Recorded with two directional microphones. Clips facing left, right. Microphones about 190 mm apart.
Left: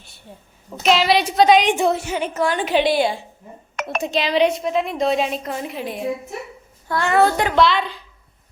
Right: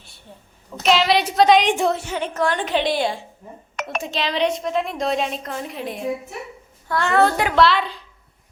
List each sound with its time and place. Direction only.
0.8 s a woman's voice: centre (ahead or behind)
3.8 s chink: 55° left (ahead or behind)
4.1 s a woman's voice: 10° left (ahead or behind)